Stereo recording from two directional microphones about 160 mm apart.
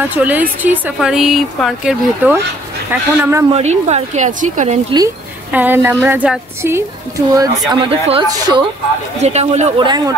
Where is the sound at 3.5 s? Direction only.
45° right (ahead or behind).